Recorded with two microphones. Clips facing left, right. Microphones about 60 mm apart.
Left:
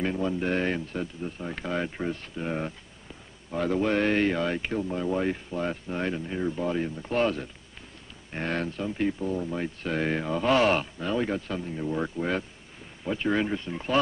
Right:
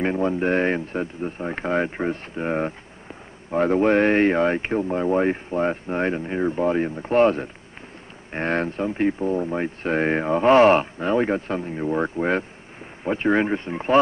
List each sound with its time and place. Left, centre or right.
0.0 s speech: right